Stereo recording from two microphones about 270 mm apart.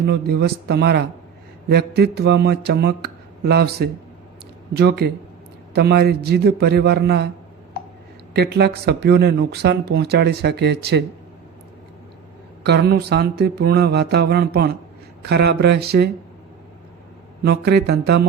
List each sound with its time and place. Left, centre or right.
0.0 s speech: right
8.3 s speech: right
12.6 s speech: right
17.4 s speech: right